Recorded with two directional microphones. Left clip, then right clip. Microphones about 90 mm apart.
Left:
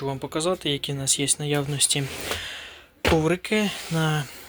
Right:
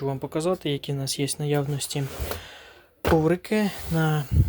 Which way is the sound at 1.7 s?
35° right (ahead or behind).